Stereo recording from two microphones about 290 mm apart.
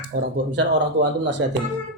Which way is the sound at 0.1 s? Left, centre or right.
Right.